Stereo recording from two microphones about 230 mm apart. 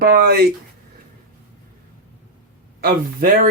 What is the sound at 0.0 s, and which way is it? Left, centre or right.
Speech, right.